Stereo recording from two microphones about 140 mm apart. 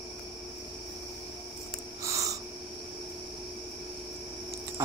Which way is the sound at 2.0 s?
25° right (ahead or behind).